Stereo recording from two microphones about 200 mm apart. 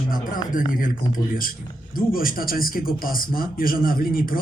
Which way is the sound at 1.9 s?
45° left (ahead or behind).